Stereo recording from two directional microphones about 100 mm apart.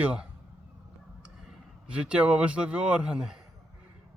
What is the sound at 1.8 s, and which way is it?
Speech, 10° right (ahead or behind).